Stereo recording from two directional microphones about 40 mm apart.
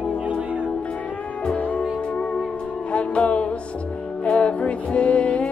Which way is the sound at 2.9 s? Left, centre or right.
Left.